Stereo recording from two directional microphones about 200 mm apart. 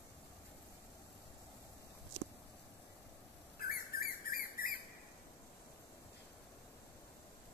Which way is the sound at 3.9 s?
45° left (ahead or behind).